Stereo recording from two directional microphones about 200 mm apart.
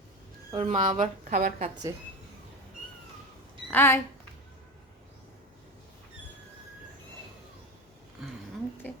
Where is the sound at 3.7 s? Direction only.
10° left (ahead or behind).